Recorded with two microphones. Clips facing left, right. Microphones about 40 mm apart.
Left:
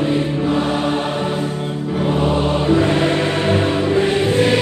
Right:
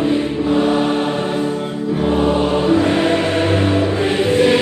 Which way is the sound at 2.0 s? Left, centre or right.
Centre.